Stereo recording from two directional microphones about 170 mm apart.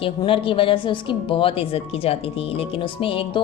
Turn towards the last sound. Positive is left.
turn(degrees=30)  # may be behind; listen again after turning